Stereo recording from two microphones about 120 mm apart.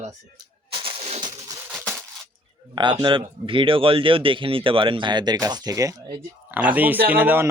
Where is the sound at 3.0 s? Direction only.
45° right (ahead or behind); by 6.2 s 30° right (ahead or behind).